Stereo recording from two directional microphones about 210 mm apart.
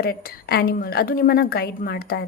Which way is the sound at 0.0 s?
45° left (ahead or behind).